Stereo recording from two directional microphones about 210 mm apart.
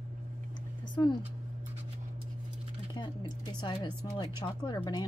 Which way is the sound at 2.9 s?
20° left (ahead or behind).